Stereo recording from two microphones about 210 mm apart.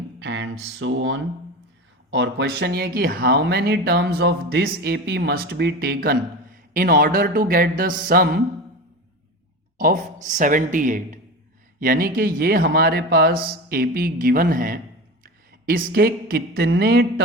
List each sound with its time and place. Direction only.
0.2 s speech: 60° right (ahead or behind)
9.7 s speech: 40° right (ahead or behind)